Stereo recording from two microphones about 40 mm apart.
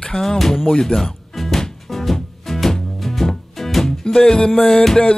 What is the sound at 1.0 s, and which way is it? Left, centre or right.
Music, centre.